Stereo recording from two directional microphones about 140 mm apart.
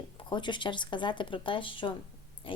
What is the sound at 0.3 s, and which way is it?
A woman's voice, 35° left (ahead or behind).